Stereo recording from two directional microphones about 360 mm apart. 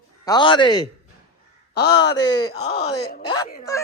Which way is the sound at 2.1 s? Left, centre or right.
Centre.